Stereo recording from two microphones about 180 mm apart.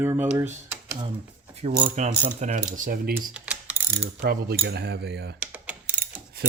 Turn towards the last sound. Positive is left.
turn(degrees=-55)  # may be behind; listen again after turning